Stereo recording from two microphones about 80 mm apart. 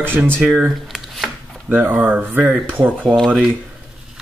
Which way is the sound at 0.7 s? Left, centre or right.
Centre.